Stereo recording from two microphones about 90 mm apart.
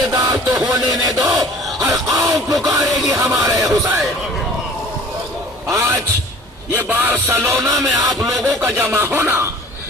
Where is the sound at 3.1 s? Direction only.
40° right (ahead or behind).